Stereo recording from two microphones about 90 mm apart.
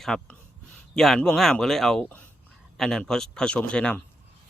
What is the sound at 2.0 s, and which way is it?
Speech, 15° left (ahead or behind).